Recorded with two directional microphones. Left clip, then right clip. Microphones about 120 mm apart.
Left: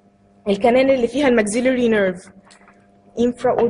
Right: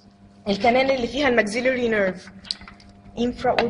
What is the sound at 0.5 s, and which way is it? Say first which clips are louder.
Speech: left 4 dB; 40° left (ahead or behind).